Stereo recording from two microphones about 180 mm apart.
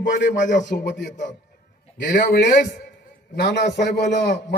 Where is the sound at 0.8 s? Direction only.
70° left (ahead or behind).